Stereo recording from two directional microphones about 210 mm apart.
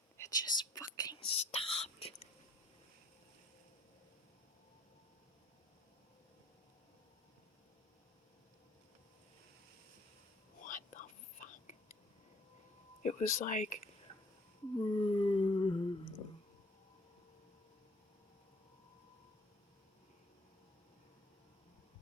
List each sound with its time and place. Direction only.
0.2 s whispering: 20° left (ahead or behind)
10.6 s whispering: 35° left (ahead or behind)
13.0 s speech: 35° left (ahead or behind)
14.8 s humming: 25° left (ahead or behind)